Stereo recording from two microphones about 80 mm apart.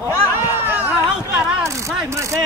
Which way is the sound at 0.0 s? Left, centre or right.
Right.